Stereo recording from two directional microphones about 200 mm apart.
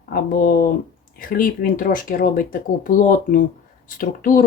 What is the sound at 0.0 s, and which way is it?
Speech, 45° left (ahead or behind).